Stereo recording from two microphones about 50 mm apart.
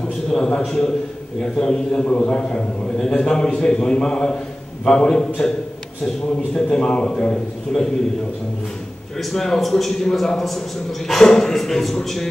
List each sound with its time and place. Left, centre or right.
0.3 s a man's voice: centre
6.5 s a man's voice: centre
9.2 s a man's voice: centre